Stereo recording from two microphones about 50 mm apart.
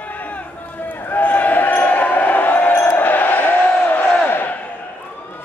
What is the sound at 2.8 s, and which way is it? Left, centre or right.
Crowd, left.